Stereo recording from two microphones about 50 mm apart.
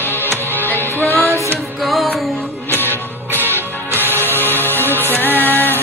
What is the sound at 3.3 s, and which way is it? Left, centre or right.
Music, left.